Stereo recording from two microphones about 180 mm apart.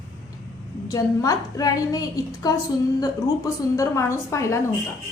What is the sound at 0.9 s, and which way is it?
A woman's voice, 20° left (ahead or behind).